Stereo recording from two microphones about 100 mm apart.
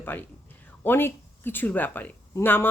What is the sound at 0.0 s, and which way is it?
Speech, 20° left (ahead or behind).